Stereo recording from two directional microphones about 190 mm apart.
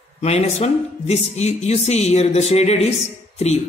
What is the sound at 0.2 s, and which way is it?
Speech, 35° left (ahead or behind).